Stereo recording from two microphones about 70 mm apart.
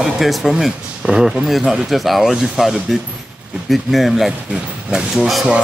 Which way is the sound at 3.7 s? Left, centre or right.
Centre.